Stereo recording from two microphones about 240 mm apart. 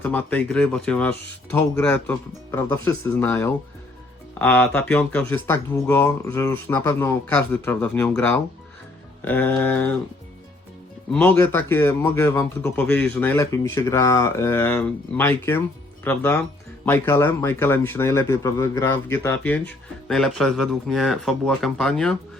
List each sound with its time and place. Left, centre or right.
0.0 s a man's voice: centre
11.1 s a man's voice: centre